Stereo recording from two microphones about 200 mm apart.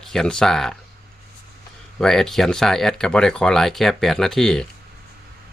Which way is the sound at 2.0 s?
Centre (ahead or behind).